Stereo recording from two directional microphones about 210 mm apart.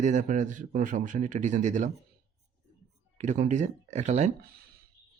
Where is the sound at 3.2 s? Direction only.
35° right (ahead or behind).